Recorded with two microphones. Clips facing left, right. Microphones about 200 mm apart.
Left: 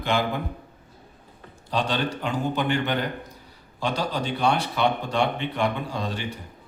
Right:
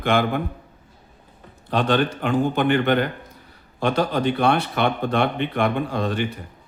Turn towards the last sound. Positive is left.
turn(degrees=-55)  # may be behind; listen again after turning